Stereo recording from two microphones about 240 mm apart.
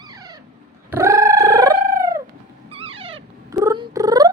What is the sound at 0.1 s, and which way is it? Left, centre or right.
Dog, centre.